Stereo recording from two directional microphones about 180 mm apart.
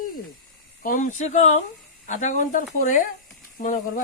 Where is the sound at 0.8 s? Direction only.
45° left (ahead or behind).